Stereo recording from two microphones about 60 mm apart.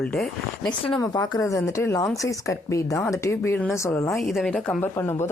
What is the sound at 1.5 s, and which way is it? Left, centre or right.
Speech, left.